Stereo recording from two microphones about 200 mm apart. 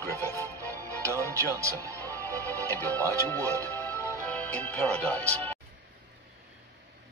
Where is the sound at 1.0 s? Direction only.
15° right (ahead or behind).